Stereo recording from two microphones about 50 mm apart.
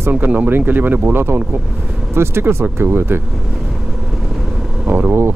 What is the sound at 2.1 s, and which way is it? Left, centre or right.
Speech, right.